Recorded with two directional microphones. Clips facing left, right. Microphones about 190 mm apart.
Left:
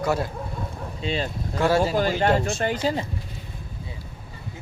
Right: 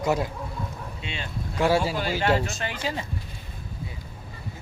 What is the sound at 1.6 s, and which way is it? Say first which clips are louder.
Speech: left 1 dB; 15° right (ahead or behind).